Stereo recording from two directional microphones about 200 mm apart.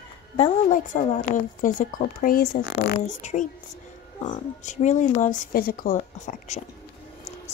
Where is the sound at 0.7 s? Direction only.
40° left (ahead or behind).